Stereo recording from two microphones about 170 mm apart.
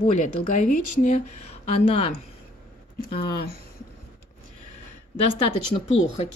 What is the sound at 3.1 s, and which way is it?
Speech, 65° left (ahead or behind).